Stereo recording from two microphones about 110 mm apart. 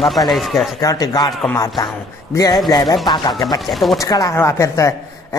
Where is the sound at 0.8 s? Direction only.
35° left (ahead or behind).